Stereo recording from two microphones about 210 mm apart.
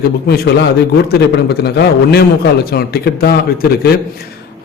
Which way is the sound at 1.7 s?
55° left (ahead or behind).